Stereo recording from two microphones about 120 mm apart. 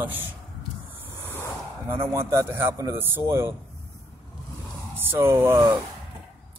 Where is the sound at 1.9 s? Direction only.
20° right (ahead or behind).